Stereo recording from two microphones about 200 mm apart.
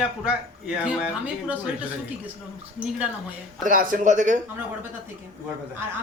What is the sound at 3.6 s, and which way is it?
Speech, 40° right (ahead or behind).